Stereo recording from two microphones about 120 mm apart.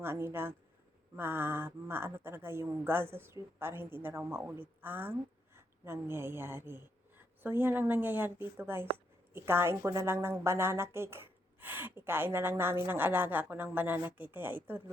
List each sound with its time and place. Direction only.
0.0 s a woman's voice: 20° right (ahead or behind)